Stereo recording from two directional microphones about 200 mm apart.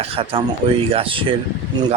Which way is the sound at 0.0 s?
25° right (ahead or behind).